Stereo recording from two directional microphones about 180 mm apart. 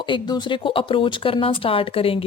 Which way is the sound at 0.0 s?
25° left (ahead or behind).